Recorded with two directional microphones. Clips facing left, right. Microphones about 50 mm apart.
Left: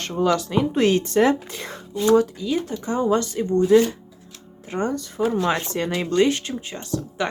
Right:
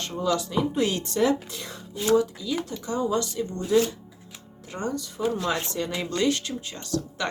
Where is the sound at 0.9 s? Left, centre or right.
Left.